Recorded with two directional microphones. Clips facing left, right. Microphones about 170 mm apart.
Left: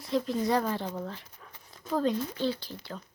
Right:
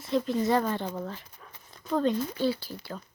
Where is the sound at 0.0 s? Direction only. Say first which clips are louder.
Right 2 dB; centre (ahead or behind).